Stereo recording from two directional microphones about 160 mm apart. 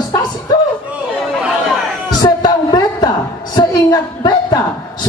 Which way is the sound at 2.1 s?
25° left (ahead or behind).